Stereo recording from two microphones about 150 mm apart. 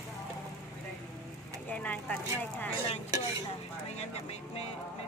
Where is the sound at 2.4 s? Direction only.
10° left (ahead or behind).